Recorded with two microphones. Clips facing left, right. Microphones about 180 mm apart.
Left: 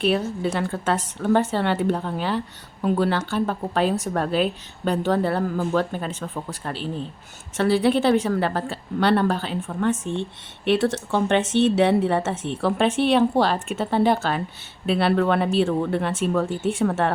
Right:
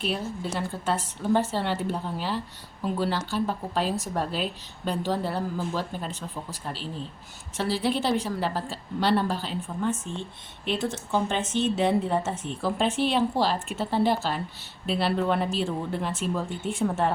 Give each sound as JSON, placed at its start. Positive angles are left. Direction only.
{"t": 0.0, "sound": "a woman's voice", "side_deg": 70}